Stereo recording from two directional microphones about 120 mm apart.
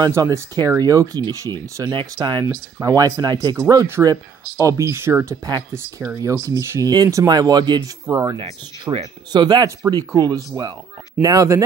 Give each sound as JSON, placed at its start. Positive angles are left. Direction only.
{"t": 0.0, "sound": "speech", "side_deg": -30}
{"t": 1.9, "sound": "speech", "side_deg": -40}
{"t": 8.4, "sound": "speech", "side_deg": -45}